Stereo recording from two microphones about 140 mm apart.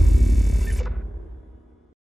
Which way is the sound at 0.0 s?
Centre (ahead or behind).